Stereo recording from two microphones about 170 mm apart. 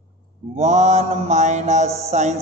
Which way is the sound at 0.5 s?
40° right (ahead or behind).